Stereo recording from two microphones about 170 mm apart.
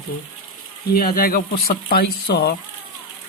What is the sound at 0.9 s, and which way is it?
Speech, 60° left (ahead or behind).